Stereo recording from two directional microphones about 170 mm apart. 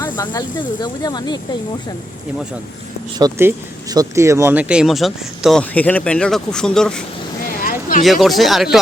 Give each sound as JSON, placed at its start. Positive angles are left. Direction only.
{"t": 0.0, "sound": "speech", "side_deg": 20}
{"t": 3.2, "sound": "speech", "side_deg": -20}
{"t": 7.4, "sound": "a sound", "side_deg": 55}
{"t": 8.0, "sound": "speech", "side_deg": 0}